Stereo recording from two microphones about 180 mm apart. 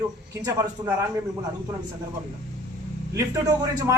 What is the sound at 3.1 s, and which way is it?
Speech, 20° right (ahead or behind).